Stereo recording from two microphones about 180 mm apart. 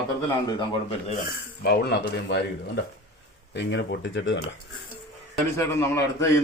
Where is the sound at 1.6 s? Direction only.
60° left (ahead or behind).